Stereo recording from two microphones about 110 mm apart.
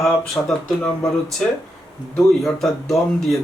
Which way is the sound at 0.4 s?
15° left (ahead or behind).